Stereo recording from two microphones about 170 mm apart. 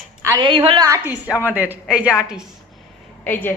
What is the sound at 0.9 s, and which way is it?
A woman's voice, 15° right (ahead or behind).